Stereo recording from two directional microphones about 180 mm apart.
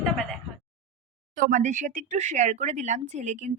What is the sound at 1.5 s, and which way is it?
Speech, 45° right (ahead or behind).